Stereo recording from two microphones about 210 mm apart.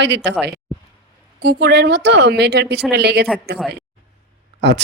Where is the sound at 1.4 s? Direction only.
50° right (ahead or behind).